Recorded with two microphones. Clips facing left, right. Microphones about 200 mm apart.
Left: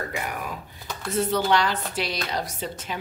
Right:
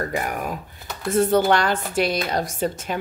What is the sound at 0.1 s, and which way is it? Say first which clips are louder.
A woman's voice: right 5 dB; 50° right (ahead or behind).